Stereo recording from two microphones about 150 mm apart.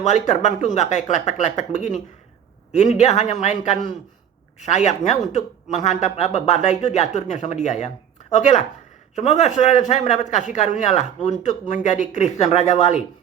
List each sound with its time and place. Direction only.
0.0 s speech: 50° left (ahead or behind)